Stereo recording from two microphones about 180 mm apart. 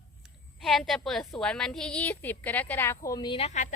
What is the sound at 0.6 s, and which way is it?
A woman's voice, centre (ahead or behind).